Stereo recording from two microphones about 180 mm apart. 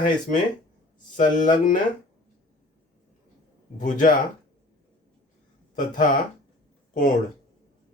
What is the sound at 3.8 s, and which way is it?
Speech, 45° left (ahead or behind).